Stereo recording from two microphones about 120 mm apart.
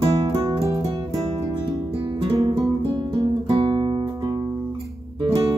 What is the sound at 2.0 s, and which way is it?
Music, 50° right (ahead or behind).